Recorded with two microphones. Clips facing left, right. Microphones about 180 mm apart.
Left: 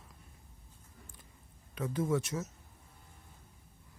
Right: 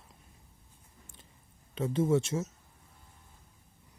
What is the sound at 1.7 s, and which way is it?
Speech, 25° right (ahead or behind).